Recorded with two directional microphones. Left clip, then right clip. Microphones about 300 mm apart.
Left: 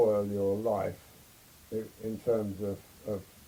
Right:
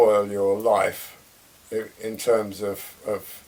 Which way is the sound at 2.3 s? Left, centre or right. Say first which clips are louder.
Right 9 dB; centre.